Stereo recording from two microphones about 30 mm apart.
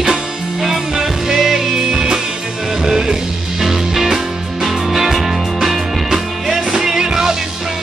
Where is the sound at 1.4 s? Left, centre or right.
Centre.